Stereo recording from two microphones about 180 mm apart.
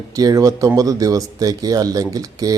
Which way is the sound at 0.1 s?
20° right (ahead or behind).